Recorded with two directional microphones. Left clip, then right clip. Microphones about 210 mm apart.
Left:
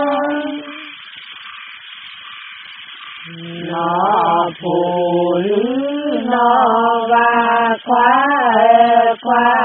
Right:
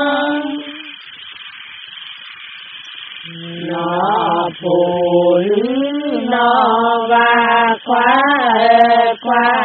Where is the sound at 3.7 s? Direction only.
30° right (ahead or behind).